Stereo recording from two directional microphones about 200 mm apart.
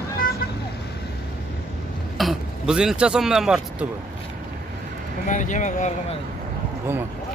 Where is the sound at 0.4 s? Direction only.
45° left (ahead or behind).